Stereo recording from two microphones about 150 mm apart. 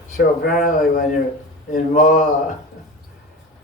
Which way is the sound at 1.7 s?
55° left (ahead or behind).